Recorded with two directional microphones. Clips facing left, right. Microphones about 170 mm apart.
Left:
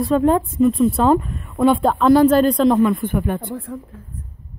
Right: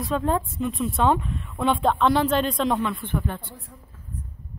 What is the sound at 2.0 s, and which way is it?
Speech, 40° left (ahead or behind).